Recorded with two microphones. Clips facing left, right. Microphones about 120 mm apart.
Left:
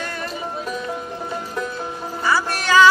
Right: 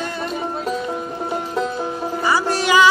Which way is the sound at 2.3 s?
15° right (ahead or behind).